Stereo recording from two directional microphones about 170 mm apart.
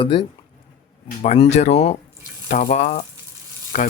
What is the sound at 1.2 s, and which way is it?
Speech, 40° left (ahead or behind).